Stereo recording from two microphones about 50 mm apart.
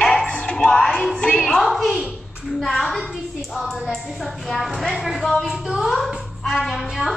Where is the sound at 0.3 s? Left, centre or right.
Left.